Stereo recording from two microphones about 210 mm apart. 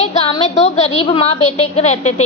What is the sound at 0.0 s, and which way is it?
A woman's voice, 30° left (ahead or behind).